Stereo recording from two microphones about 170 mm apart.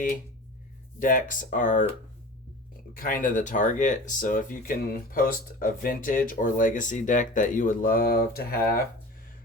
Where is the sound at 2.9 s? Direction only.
55° left (ahead or behind).